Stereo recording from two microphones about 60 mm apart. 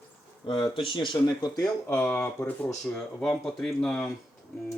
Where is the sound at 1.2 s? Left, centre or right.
Left.